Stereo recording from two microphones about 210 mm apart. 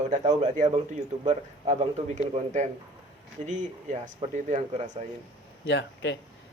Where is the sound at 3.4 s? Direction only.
35° right (ahead or behind).